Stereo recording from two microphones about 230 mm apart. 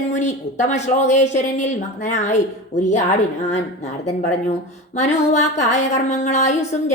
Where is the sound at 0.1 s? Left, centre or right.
Left.